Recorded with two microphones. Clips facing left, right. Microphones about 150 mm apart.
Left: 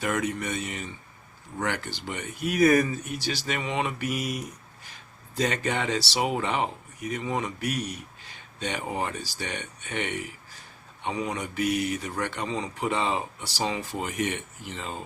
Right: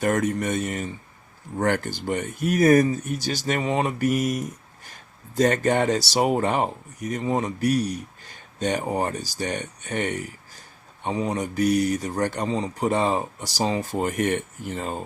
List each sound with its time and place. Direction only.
0.0 s speech: 45° right (ahead or behind)